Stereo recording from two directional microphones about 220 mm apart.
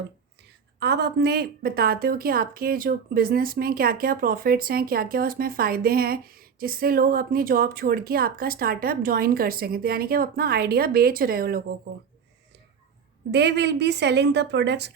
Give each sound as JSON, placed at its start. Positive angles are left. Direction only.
{"t": 0.8, "sound": "speech", "side_deg": -50}
{"t": 13.3, "sound": "speech", "side_deg": -50}